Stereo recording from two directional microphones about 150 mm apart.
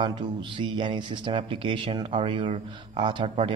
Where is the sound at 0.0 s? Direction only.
30° right (ahead or behind).